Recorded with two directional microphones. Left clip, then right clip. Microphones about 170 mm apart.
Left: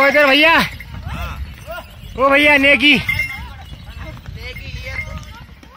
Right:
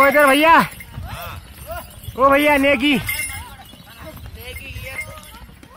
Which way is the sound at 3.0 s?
30° left (ahead or behind).